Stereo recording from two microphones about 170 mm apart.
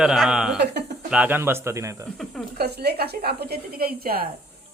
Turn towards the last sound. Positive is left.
turn(degrees=-60)  # may be behind; listen again after turning